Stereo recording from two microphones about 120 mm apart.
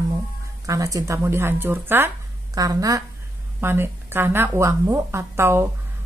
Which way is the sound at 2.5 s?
30° right (ahead or behind).